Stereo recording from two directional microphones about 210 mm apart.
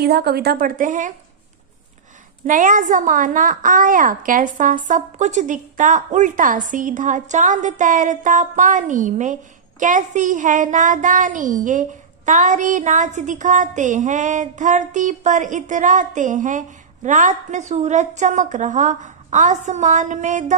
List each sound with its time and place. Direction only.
0.0 s speech: 50° right (ahead or behind)
2.4 s a woman's voice: 40° right (ahead or behind)